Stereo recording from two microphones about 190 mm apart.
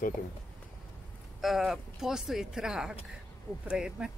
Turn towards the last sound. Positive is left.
turn(degrees=-5)  # may be behind; listen again after turning